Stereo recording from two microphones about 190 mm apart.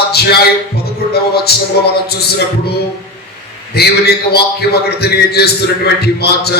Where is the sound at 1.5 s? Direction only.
55° left (ahead or behind).